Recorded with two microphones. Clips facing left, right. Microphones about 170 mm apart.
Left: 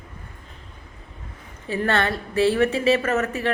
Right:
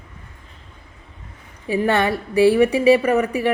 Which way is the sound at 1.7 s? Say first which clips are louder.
Right 4 dB; 15° right (ahead or behind).